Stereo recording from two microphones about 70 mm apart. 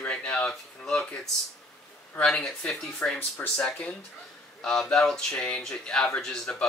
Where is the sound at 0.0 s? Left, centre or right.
Centre.